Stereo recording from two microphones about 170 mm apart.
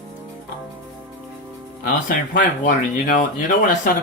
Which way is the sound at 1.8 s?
50° left (ahead or behind).